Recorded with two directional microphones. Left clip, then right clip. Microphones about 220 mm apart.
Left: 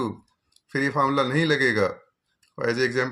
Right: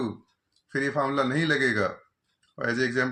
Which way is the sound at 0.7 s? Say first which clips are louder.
Left 4 dB; 50° left (ahead or behind).